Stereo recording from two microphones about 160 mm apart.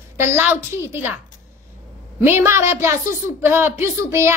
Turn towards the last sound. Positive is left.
turn(degrees=-15)  # may be behind; listen again after turning